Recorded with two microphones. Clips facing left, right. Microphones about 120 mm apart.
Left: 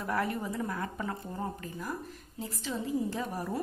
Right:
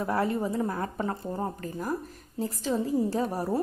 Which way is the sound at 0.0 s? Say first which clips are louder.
Right 5 dB; 30° right (ahead or behind).